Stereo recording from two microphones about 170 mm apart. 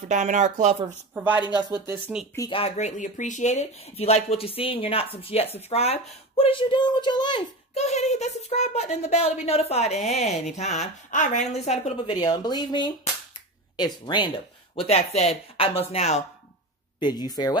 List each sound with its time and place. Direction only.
0.1 s speech: 45° right (ahead or behind)
1.1 s speech: 10° right (ahead or behind)
2.5 s speech: 40° left (ahead or behind)
7.8 s speech: 40° left (ahead or behind)
12.2 s speech: 25° left (ahead or behind)
14.8 s speech: 40° left (ahead or behind)
17.0 s speech: 25° left (ahead or behind)